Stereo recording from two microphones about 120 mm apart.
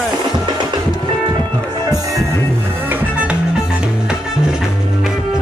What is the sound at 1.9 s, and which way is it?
Music, 30° right (ahead or behind).